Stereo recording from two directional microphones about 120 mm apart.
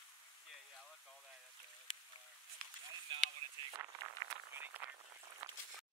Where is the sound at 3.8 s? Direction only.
20° right (ahead or behind).